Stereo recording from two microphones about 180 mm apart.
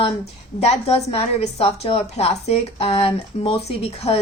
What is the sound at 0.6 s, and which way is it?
A woman's voice, 35° left (ahead or behind).